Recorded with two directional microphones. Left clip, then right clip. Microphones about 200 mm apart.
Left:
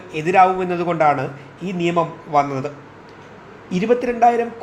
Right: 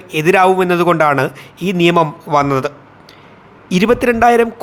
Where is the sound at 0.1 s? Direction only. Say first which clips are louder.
Right 4 dB; 35° right (ahead or behind).